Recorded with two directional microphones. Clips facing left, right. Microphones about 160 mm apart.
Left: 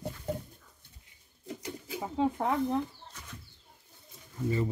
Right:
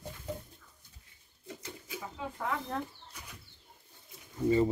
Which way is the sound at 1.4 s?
30° left (ahead or behind).